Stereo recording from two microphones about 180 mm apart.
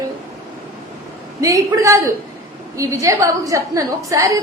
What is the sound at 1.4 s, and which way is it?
A woman's voice, 20° right (ahead or behind).